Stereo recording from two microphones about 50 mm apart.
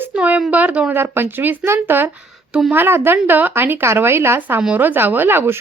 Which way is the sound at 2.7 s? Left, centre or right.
Right.